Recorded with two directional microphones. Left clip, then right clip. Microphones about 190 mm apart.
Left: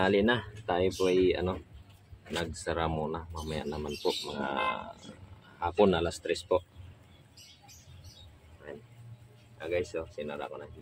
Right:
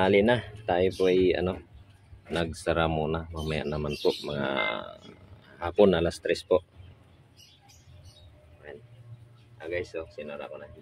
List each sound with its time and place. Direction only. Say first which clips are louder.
0.0 s speech: right 4 dB; 30° right (ahead or behind)
8.6 s a sound: even; 5° right (ahead or behind)
9.6 s speech: left 1 dB; 15° left (ahead or behind)